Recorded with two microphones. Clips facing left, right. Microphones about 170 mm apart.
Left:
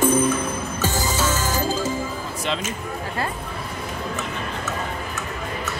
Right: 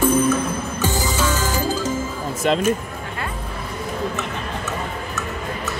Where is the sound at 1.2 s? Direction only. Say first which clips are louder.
Right 1 dB; 40° left (ahead or behind).